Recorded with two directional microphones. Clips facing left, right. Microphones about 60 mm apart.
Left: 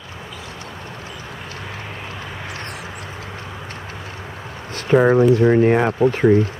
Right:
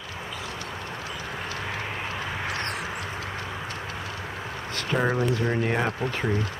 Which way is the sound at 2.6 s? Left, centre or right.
Centre.